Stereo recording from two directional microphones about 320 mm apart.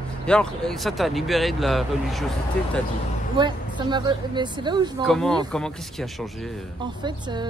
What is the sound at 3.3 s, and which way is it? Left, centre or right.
A woman's voice, centre.